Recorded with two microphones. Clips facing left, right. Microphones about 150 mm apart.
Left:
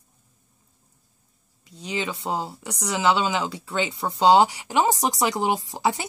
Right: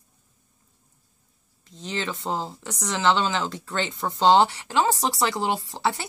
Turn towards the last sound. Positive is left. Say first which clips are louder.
# left 2 dB
turn(degrees=15)  # may be behind; listen again after turning